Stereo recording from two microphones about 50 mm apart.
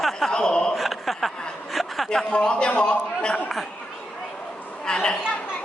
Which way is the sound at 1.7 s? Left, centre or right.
Centre.